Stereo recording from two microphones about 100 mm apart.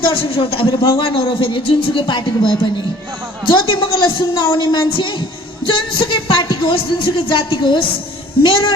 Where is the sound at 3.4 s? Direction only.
60° left (ahead or behind).